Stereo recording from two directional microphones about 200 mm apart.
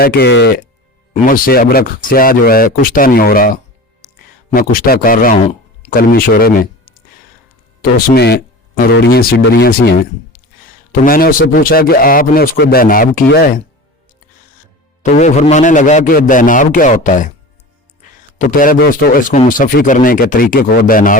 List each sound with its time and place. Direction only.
0.0 s speech: 50° left (ahead or behind)
1.1 s speech: 45° left (ahead or behind)
7.8 s speech: 50° left (ahead or behind)
15.0 s a man's voice: 35° left (ahead or behind)
18.3 s speech: 40° left (ahead or behind)